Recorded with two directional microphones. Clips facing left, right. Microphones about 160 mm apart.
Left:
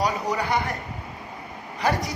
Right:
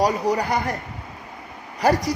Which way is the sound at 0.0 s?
35° right (ahead or behind).